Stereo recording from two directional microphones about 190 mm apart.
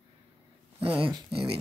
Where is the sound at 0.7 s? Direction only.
25° right (ahead or behind).